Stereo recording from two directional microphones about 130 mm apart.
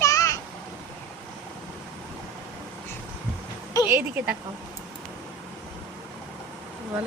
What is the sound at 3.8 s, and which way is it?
Speech, 15° right (ahead or behind).